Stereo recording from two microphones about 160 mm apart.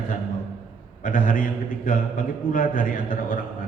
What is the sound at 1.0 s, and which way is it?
A man's voice, 60° left (ahead or behind).